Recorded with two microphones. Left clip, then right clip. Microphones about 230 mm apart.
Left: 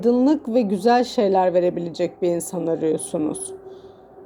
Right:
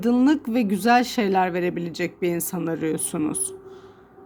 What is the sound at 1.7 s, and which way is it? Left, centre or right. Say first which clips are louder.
Speech: left 2 dB; right.